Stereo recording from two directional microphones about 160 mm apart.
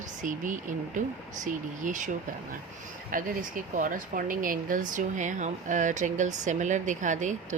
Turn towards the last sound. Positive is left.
turn(degrees=-50)  # may be behind; listen again after turning